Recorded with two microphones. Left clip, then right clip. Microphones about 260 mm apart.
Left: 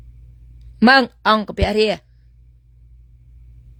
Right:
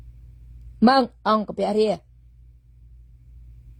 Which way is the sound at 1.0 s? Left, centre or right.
Left.